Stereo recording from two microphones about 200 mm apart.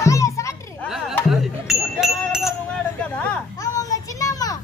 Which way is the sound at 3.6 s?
15° left (ahead or behind).